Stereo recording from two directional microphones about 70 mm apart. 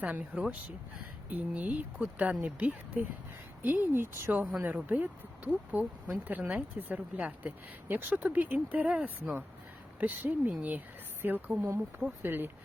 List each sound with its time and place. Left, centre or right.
0.0 s speech: right
6.4 s speech: centre
6.7 s speech: right